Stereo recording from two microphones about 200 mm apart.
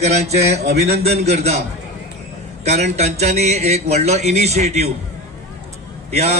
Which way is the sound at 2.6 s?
35° right (ahead or behind).